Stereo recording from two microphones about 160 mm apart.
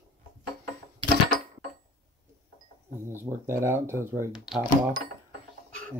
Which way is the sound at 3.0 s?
15° right (ahead or behind).